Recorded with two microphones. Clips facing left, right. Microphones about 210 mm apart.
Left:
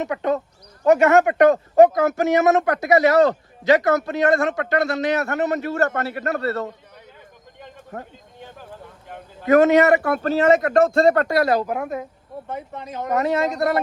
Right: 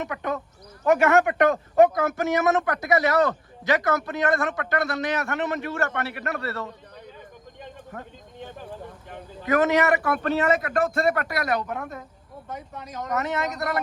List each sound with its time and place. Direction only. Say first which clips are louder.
0.0 s speech: left 7 dB; 20° left (ahead or behind)
5.3 s a man's voice: left 5 dB; 40° left (ahead or behind)
6.1 s speech: left 6 dB; 25° left (ahead or behind)
9.5 s speech: left 7 dB; 20° left (ahead or behind)